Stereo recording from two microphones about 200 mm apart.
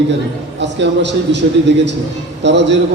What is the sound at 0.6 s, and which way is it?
Speech, 60° right (ahead or behind).